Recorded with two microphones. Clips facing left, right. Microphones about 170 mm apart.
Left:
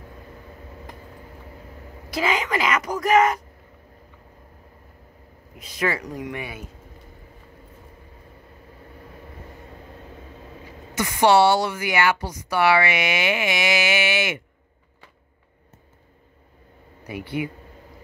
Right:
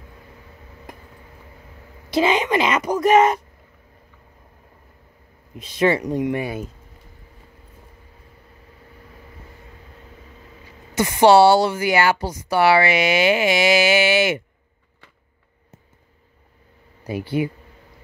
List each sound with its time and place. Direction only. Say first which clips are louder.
2.0 s a woman's voice: right 6 dB; 25° right (ahead or behind)
5.6 s a woman's voice: right 7 dB; 25° right (ahead or behind)
11.0 s speech: right 4 dB; 30° right (ahead or behind)
17.0 s speech: right 5 dB; 30° right (ahead or behind)